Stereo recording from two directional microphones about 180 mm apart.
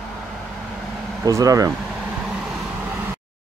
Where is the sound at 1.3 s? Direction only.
20° right (ahead or behind).